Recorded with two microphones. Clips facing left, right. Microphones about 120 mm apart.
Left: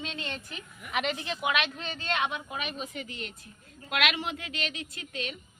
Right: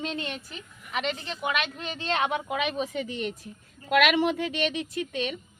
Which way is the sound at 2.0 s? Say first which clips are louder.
Right 4 dB; 30° right (ahead or behind).